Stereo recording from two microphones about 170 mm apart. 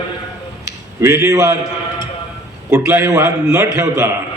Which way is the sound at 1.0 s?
15° right (ahead or behind).